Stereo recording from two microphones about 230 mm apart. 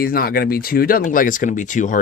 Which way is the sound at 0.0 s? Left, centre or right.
Left.